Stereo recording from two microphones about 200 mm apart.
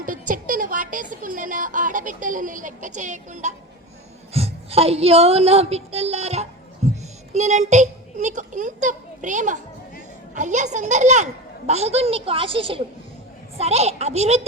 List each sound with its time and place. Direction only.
0.0 s a woman's voice: 40° right (ahead or behind)